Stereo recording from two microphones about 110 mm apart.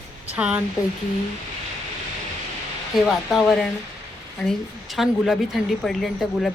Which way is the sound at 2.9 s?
Centre (ahead or behind).